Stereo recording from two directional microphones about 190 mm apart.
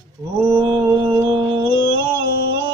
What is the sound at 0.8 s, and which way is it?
Music, 20° right (ahead or behind).